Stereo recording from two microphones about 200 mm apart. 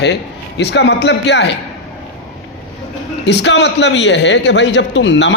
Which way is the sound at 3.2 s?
60° left (ahead or behind).